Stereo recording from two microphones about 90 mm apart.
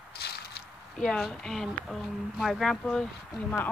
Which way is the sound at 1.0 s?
10° left (ahead or behind).